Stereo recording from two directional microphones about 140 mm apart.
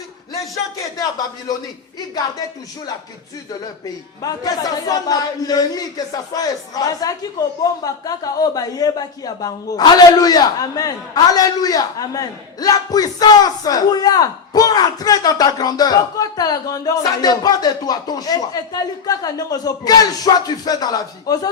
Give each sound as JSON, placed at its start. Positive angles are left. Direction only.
{"t": 4.2, "sound": "speech", "side_deg": 25}